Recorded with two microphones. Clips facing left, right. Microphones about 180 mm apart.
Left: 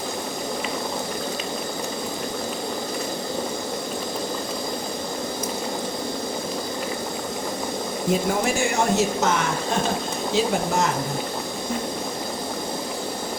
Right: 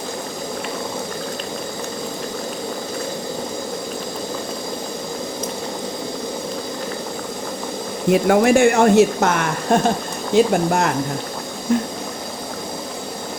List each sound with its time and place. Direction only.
8.1 s speech: 65° right (ahead or behind)